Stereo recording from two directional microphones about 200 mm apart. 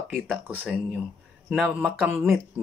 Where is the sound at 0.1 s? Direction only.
5° right (ahead or behind).